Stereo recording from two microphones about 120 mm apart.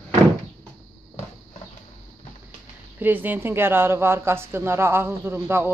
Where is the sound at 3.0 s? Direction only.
15° right (ahead or behind).